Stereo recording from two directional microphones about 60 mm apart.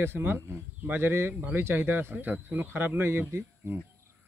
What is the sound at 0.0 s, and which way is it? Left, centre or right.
Speech, right.